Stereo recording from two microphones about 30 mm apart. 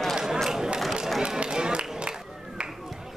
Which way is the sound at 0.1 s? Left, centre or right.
Centre.